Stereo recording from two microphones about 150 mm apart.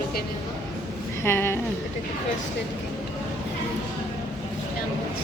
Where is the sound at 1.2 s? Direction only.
15° left (ahead or behind).